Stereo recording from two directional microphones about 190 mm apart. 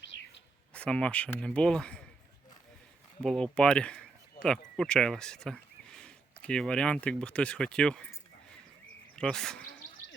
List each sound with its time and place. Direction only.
0.0 s bird: 70° left (ahead or behind)
0.7 s speech: 5° left (ahead or behind)
3.2 s speech: 5° left (ahead or behind)
9.1 s speech: 5° left (ahead or behind)